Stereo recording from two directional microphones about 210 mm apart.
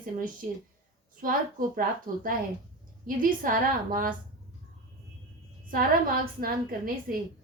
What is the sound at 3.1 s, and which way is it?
A woman's voice, 40° right (ahead or behind).